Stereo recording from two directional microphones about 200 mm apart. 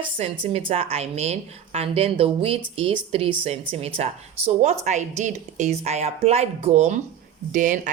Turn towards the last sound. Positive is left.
turn(degrees=-40)  # may be behind; listen again after turning